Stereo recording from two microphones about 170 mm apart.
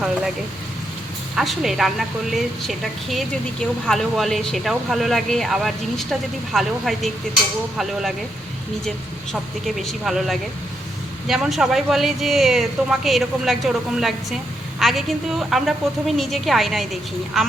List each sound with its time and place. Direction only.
1.4 s a woman's voice: centre (ahead or behind)
9.3 s a woman's voice: centre (ahead or behind)